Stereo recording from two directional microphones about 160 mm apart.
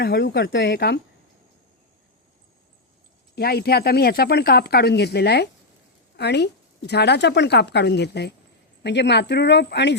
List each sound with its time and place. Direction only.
0.0 s a woman's voice: 90° left
3.3 s a woman's voice: 75° left (ahead or behind)